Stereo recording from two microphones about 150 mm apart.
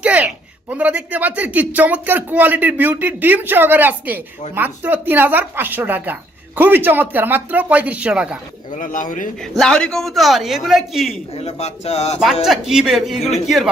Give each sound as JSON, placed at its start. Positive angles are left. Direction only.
{"t": 0.0, "sound": "a sound", "side_deg": -10}
{"t": 0.7, "sound": "a man's voice", "side_deg": -10}
{"t": 8.7, "sound": "speech", "side_deg": 60}
{"t": 9.4, "sound": "speech", "side_deg": 5}
{"t": 11.3, "sound": "speech", "side_deg": 45}
{"t": 12.5, "sound": "speech", "side_deg": 0}